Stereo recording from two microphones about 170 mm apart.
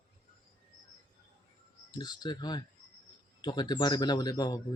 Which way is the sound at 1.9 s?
25° left (ahead or behind).